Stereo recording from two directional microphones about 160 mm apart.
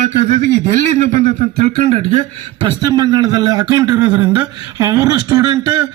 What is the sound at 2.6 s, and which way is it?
Speech, 25° right (ahead or behind).